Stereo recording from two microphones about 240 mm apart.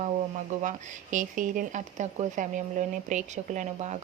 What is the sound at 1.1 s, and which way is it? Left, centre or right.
Speech, right.